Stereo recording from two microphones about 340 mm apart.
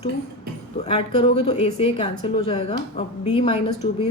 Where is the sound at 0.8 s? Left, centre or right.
Centre.